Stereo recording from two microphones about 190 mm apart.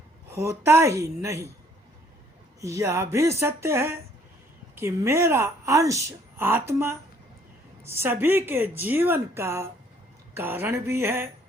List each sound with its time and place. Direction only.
0.3 s a woman's voice: 15° right (ahead or behind)
2.6 s a woman's voice: 15° right (ahead or behind)